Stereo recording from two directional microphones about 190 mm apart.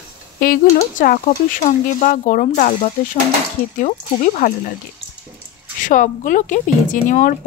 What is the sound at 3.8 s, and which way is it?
Speech, 40° left (ahead or behind).